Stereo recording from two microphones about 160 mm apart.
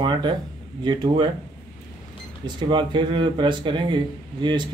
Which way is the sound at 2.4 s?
30° right (ahead or behind).